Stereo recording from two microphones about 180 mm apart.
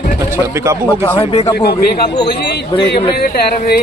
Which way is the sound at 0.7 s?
15° right (ahead or behind).